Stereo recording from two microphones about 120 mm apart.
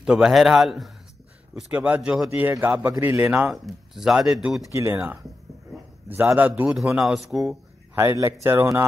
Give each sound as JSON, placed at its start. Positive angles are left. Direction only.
{"t": 0.0, "sound": "speech", "side_deg": -5}
{"t": 1.5, "sound": "speech", "side_deg": -10}
{"t": 3.4, "sound": "speech", "side_deg": 0}
{"t": 4.7, "sound": "speech", "side_deg": -20}
{"t": 6.7, "sound": "speech", "side_deg": -5}
{"t": 7.9, "sound": "speech", "side_deg": -20}